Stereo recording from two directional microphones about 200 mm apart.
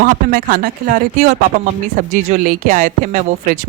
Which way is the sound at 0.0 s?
45° right (ahead or behind).